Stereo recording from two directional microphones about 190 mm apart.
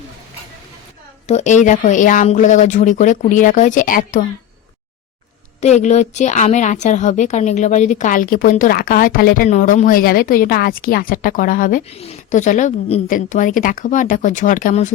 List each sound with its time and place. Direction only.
1.3 s speech: 40° left (ahead or behind)
5.5 s a woman's voice: 35° left (ahead or behind)
11.9 s a woman's voice: 30° left (ahead or behind)